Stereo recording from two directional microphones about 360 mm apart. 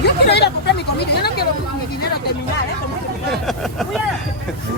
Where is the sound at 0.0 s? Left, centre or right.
Left.